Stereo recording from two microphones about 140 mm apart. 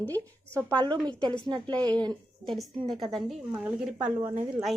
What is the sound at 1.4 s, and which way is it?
Speech, 30° right (ahead or behind).